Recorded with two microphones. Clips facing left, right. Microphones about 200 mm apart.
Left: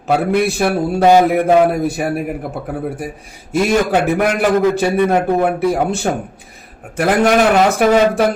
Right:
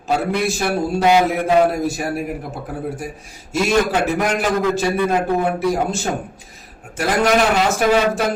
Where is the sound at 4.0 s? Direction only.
60° left (ahead or behind).